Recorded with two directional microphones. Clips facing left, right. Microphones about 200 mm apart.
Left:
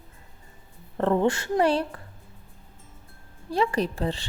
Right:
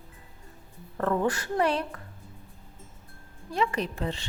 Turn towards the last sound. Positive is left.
turn(degrees=35)  # may be behind; listen again after turning